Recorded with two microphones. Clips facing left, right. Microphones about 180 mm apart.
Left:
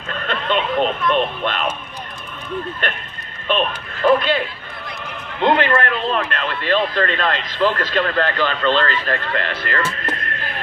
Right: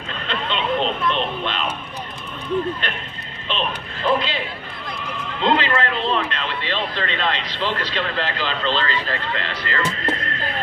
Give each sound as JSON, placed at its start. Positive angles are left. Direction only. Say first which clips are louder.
{"t": 0.1, "sound": "speech", "louder": "left 5 dB", "side_deg": 50}
{"t": 2.8, "sound": "speech", "louder": "left 3 dB", "side_deg": 50}
{"t": 5.4, "sound": "speech", "louder": "left 3 dB", "side_deg": 55}
{"t": 9.8, "sound": "speech", "louder": "right 1 dB", "side_deg": -20}